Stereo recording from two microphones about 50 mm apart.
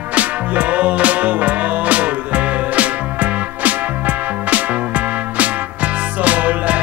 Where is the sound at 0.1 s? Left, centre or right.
Right.